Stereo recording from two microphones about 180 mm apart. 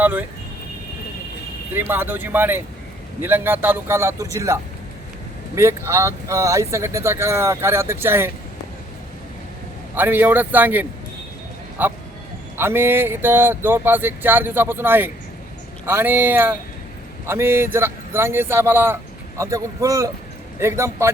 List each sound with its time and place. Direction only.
0.0 s speech: 10° right (ahead or behind)
1.7 s speech: 10° right (ahead or behind)
9.9 s speech: 10° right (ahead or behind)